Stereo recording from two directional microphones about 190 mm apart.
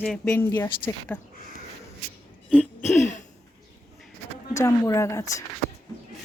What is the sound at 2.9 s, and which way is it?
Throat clearing, 40° left (ahead or behind).